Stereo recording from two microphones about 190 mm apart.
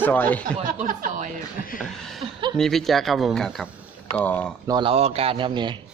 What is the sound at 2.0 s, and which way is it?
Speech, centre (ahead or behind).